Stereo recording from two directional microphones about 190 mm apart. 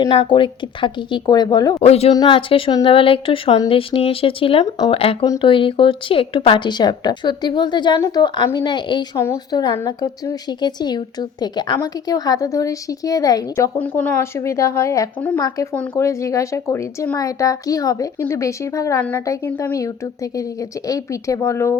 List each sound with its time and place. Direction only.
0.0 s a woman's voice: 30° left (ahead or behind)
1.8 s a woman's voice: 35° left (ahead or behind); by 13.7 s 20° left (ahead or behind)
13.7 s a woman's voice: 10° left (ahead or behind)